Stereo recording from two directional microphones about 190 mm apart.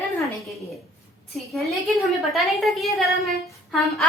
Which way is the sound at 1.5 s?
Centre (ahead or behind).